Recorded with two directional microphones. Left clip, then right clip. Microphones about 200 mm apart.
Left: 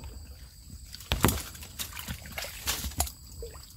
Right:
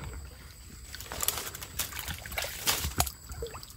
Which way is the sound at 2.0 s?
50° right (ahead or behind).